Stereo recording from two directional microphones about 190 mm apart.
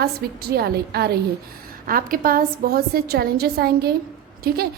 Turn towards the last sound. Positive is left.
turn(degrees=-55)  # may be behind; listen again after turning